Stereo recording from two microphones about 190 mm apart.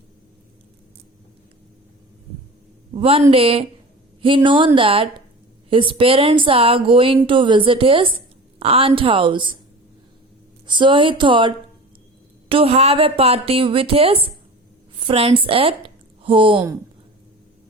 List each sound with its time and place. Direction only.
2.9 s a woman's voice: 30° right (ahead or behind)
10.7 s a woman's voice: 25° right (ahead or behind)